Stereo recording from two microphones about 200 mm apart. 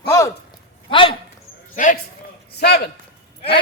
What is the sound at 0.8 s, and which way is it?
Speech, 25° left (ahead or behind).